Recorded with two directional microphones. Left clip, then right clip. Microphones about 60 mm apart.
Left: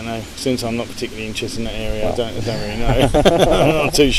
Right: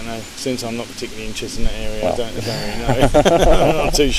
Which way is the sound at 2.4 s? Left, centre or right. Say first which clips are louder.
Even; right.